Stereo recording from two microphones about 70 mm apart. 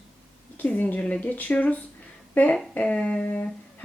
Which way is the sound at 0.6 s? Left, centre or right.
Left.